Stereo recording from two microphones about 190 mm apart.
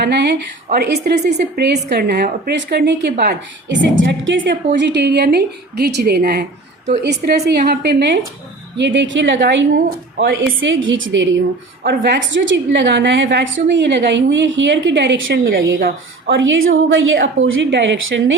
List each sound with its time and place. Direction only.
0.0 s a woman's voice: 60° right (ahead or behind)
11.8 s a woman's voice: 60° right (ahead or behind)
16.4 s a woman's voice: 90° right
17.4 s a woman's voice: 75° right (ahead or behind)